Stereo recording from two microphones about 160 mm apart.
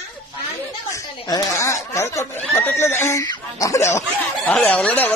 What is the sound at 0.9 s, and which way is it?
Speech, 25° left (ahead or behind).